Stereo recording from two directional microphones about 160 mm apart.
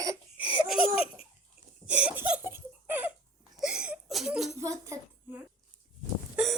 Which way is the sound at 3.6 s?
5° right (ahead or behind).